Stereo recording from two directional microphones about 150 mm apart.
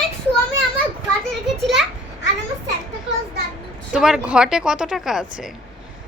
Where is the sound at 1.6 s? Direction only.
Centre (ahead or behind).